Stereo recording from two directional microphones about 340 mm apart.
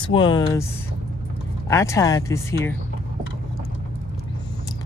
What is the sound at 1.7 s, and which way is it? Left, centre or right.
Speech, centre.